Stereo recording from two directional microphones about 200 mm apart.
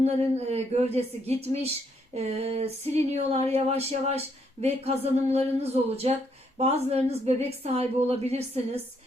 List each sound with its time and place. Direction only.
0.0 s a woman's voice: 30° right (ahead or behind)